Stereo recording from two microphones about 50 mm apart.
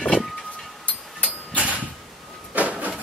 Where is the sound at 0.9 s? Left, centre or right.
Left.